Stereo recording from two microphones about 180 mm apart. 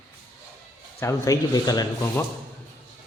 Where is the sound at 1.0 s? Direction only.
20° left (ahead or behind).